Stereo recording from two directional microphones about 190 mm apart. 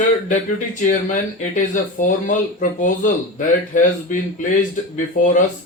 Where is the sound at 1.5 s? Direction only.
40° left (ahead or behind).